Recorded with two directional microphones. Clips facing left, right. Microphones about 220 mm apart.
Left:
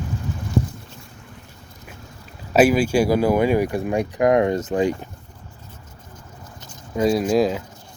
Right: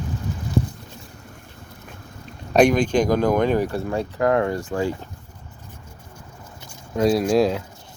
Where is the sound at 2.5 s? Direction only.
5° left (ahead or behind).